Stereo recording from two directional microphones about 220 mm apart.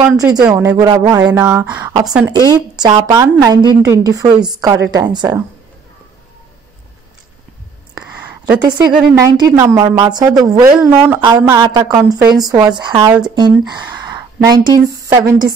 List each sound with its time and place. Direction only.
0.1 s a woman's voice: 15° right (ahead or behind)
0.4 s a woman's voice: 5° right (ahead or behind)
2.0 s speech: 5° right (ahead or behind)
2.3 s a woman's voice: 20° right (ahead or behind)
8.0 s a sound: 5° right (ahead or behind)
8.5 s a woman's voice: 20° right (ahead or behind)